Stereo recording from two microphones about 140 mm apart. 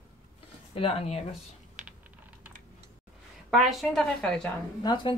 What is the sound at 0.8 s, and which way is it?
Speech, 45° left (ahead or behind).